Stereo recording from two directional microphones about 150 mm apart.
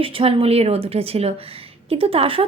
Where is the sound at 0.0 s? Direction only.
35° right (ahead or behind).